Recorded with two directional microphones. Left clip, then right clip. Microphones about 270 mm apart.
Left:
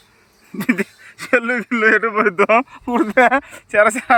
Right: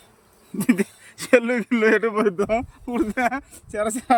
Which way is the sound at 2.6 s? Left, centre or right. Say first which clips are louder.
Left 8 dB; left.